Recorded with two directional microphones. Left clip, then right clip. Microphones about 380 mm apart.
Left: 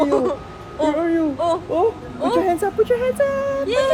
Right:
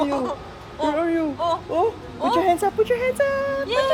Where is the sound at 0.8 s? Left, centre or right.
Centre.